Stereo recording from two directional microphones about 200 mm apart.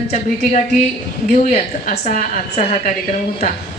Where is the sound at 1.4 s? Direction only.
35° left (ahead or behind).